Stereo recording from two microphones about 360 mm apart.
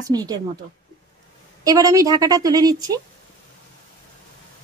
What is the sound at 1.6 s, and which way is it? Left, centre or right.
Speech, centre.